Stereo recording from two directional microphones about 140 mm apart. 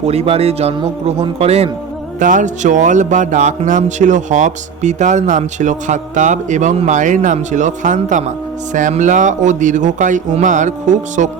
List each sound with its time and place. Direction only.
0.0 s speech: 50° right (ahead or behind)
2.1 s music: 65° right (ahead or behind)